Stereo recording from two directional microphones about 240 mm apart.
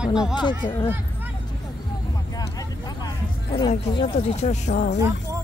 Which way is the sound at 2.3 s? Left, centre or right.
Centre.